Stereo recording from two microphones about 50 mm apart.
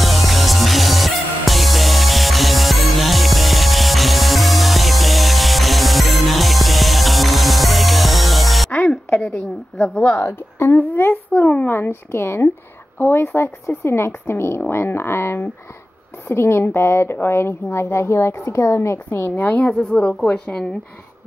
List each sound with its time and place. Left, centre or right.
0.0 s music: centre
9.1 s a sound: left
9.8 s a woman's voice: centre
10.1 s a woman's voice: left
10.7 s a child's voice: left
19.4 s speech: left